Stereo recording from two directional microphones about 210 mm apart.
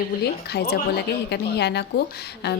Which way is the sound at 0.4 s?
50° left (ahead or behind).